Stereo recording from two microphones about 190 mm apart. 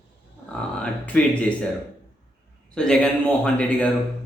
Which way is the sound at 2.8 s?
5° left (ahead or behind).